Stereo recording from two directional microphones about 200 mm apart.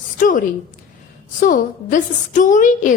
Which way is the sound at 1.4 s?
40° left (ahead or behind).